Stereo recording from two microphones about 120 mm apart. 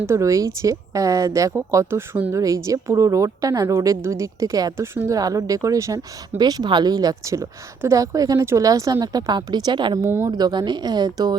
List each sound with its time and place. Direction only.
0.0 s speech: 25° right (ahead or behind)
2.3 s a woman's voice: 30° right (ahead or behind)
10.0 s speech: 25° right (ahead or behind)
10.3 s a woman's voice: 35° right (ahead or behind)